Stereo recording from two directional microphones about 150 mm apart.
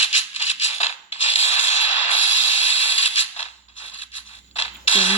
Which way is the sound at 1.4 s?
45° left (ahead or behind).